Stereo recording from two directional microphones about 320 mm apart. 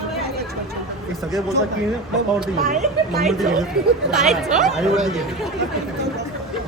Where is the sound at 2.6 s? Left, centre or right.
Right.